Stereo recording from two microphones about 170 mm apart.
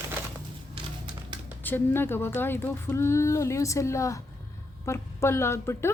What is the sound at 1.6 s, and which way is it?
Speech, 10° left (ahead or behind).